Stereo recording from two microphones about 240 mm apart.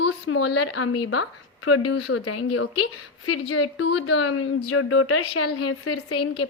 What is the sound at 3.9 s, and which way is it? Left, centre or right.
A woman's voice, left.